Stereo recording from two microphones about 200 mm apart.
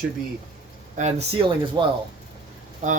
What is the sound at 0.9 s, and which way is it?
Speech, 35° right (ahead or behind).